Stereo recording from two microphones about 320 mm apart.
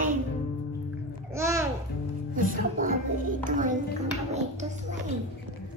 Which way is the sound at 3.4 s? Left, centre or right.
Right.